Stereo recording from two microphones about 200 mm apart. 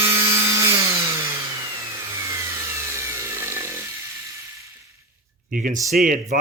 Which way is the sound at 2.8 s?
15° right (ahead or behind).